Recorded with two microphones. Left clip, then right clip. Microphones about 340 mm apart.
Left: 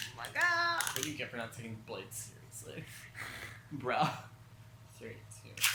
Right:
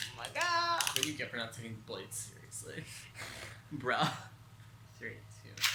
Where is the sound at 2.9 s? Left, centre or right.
Centre.